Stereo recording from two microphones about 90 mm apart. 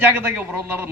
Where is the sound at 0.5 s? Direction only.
25° right (ahead or behind).